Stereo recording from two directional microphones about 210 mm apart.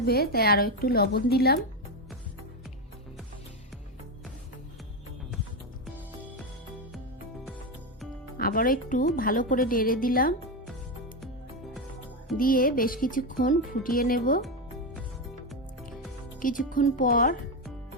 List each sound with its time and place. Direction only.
0.0 s speech: 45° left (ahead or behind)
8.4 s speech: 45° left (ahead or behind)
12.4 s speech: 45° left (ahead or behind)
16.4 s speech: 40° left (ahead or behind)